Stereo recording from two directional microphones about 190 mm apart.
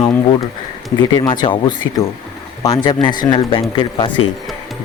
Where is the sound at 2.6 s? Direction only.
20° left (ahead or behind).